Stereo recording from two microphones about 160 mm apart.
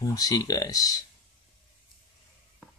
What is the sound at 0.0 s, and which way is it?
Speech, 20° left (ahead or behind).